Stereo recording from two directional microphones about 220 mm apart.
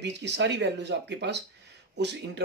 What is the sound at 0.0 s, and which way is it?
Speech, 50° right (ahead or behind).